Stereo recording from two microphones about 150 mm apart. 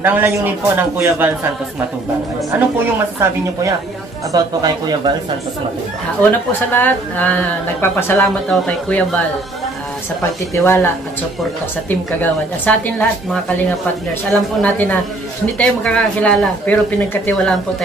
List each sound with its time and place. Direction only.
0.0 s a man's voice: 15° right (ahead or behind)
2.5 s a man's voice: 10° right (ahead or behind); by 5.1 s 30° right (ahead or behind)
6.7 s speech: 10° left (ahead or behind)
10.5 s speech: 15° left (ahead or behind)
11.9 s speech: 10° left (ahead or behind)